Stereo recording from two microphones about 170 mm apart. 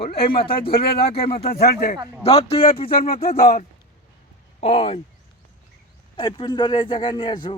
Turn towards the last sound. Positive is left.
turn(degrees=30)  # may be behind; listen again after turning